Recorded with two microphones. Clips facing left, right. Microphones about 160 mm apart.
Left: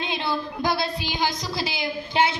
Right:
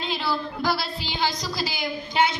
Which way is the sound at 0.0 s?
20° left (ahead or behind).